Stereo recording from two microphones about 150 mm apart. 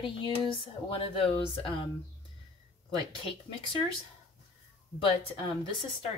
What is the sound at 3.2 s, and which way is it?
Speech, 35° left (ahead or behind).